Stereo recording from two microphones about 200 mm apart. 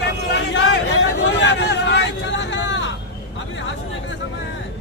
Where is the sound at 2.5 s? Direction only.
65° left (ahead or behind).